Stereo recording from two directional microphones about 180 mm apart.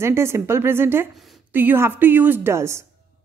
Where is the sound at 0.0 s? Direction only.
15° right (ahead or behind).